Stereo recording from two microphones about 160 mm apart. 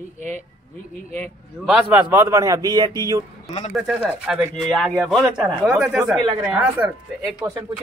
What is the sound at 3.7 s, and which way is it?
Speech, 5° right (ahead or behind).